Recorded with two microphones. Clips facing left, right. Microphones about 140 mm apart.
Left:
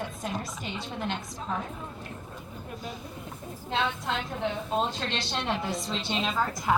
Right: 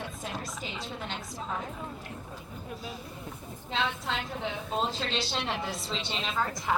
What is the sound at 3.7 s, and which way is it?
A woman's voice, centre (ahead or behind).